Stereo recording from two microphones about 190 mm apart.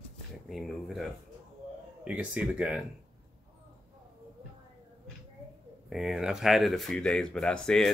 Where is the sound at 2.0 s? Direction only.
5° right (ahead or behind).